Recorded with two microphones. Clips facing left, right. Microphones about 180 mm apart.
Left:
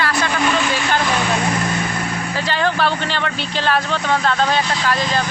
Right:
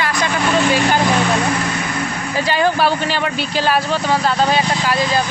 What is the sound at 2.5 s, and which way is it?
Speech, 10° right (ahead or behind).